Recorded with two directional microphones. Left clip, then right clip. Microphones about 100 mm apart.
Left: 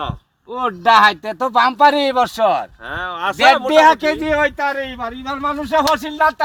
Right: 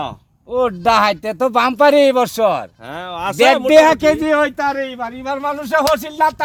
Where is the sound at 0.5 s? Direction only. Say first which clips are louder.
Left 1 dB; 40° right (ahead or behind).